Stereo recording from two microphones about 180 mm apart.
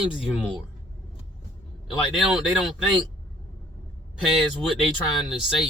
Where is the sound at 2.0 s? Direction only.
Centre (ahead or behind).